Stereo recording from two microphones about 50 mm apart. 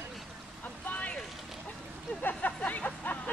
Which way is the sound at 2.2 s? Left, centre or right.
Left.